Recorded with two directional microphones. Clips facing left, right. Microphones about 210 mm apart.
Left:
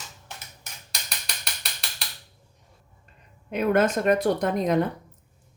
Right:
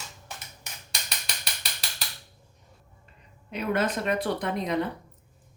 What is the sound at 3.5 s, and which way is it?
Speech, 50° left (ahead or behind).